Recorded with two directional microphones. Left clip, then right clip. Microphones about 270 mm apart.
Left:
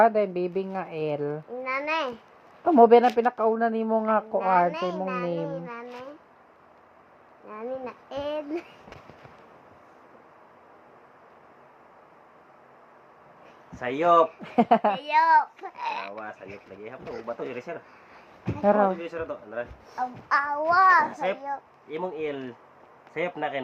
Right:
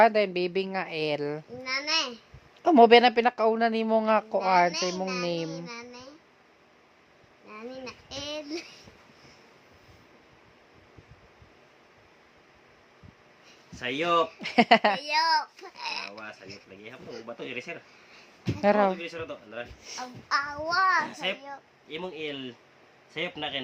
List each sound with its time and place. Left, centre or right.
0.0 s a woman's voice: centre
1.6 s a woman's voice: centre
4.0 s a woman's voice: centre
7.4 s a sound: centre
13.7 s a woman's voice: centre
15.0 s a child's voice: right
16.8 s a woman's voice: centre
20.0 s a child's voice: right
20.3 s child singing: centre
20.9 s a woman's voice: centre